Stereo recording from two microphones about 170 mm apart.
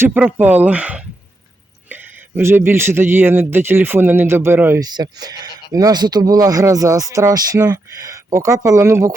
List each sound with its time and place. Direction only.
0.0 s speech: 10° right (ahead or behind)